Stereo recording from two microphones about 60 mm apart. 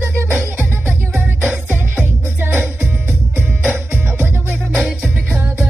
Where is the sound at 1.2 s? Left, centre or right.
Right.